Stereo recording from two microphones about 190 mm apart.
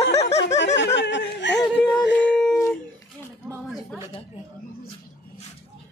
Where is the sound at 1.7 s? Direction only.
5° left (ahead or behind).